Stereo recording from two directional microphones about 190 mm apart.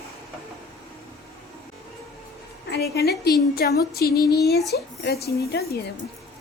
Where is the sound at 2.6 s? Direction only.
60° left (ahead or behind).